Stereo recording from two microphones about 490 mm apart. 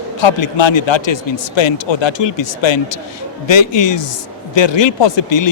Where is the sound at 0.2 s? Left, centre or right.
Left.